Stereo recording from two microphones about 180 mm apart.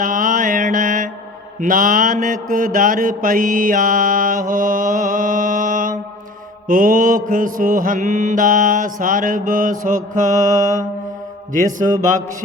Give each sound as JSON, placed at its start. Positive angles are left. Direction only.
{"t": 0.0, "sound": "mantra", "side_deg": -50}